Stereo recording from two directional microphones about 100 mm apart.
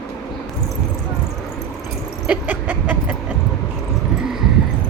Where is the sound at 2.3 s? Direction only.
15° right (ahead or behind).